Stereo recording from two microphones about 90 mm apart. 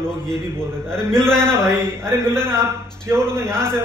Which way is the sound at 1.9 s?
30° right (ahead or behind).